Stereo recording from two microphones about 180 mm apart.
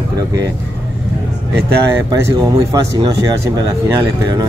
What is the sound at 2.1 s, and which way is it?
Speech, 15° right (ahead or behind).